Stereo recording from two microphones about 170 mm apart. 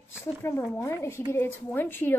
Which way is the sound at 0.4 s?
15° left (ahead or behind).